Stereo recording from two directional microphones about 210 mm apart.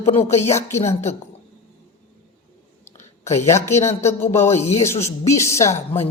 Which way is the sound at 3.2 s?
15° left (ahead or behind).